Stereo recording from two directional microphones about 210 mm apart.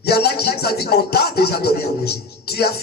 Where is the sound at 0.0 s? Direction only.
50° left (ahead or behind).